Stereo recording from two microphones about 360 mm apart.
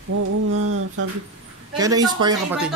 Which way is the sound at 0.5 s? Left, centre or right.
Right.